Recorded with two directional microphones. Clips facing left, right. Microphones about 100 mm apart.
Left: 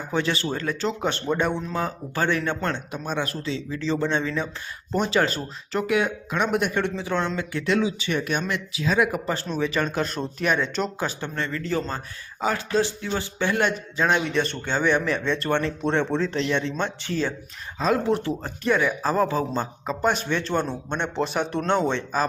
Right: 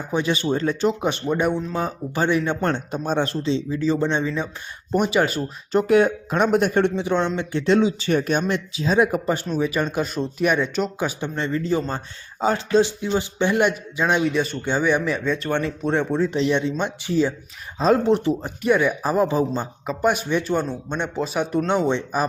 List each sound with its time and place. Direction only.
0.1 s a man's voice: 15° right (ahead or behind)
2.7 s a man's voice: 30° right (ahead or behind); by 5.8 s 15° right (ahead or behind)
5.8 s speech: 35° right (ahead or behind)
6.9 s speech: 20° right (ahead or behind)
7.9 s a man's voice: 35° right (ahead or behind); by 11.1 s 10° right (ahead or behind)
11.2 s a man's voice: 20° right (ahead or behind)
17.7 s speech: 30° right (ahead or behind)
18.1 s a man's voice: 20° right (ahead or behind)